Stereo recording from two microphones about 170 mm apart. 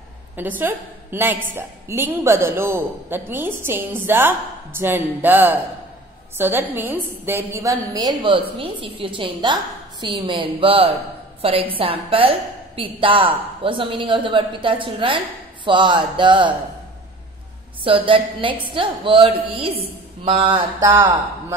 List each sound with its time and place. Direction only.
0.4 s a woman's voice: 10° right (ahead or behind); by 16.5 s 30° right (ahead or behind)
17.8 s a woman's voice: 30° right (ahead or behind)